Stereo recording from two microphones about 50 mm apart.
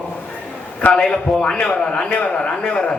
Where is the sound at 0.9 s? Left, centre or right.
Centre.